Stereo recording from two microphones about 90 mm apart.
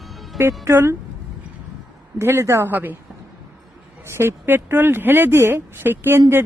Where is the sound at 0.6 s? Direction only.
30° right (ahead or behind).